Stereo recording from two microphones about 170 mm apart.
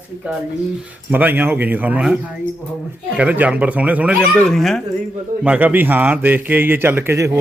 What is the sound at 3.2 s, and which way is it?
Speech, 10° right (ahead or behind).